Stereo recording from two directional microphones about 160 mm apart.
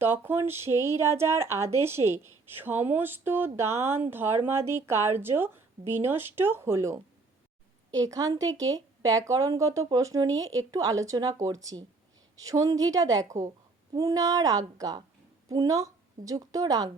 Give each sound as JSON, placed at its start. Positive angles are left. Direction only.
{"t": 0.0, "sound": "a woman's voice", "side_deg": -15}